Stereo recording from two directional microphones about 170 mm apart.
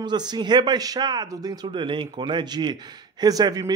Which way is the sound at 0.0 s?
25° right (ahead or behind).